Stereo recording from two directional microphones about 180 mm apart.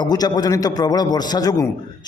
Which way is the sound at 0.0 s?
20° left (ahead or behind).